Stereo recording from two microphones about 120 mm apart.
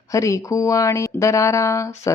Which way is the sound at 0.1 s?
25° left (ahead or behind).